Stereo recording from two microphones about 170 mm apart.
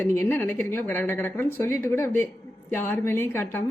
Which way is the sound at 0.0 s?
15° left (ahead or behind).